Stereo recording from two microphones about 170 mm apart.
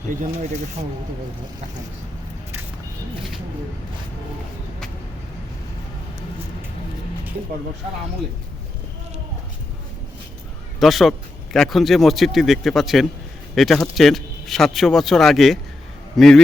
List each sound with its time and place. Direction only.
0.2 s speech: 40° right (ahead or behind)
10.8 s a man's voice: centre (ahead or behind)